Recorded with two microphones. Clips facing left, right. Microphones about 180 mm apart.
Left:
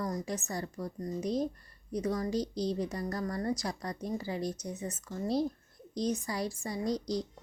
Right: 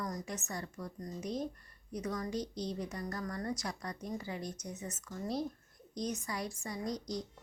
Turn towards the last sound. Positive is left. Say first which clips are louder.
# left 6 dB
turn(degrees=35)  # may be behind; listen again after turning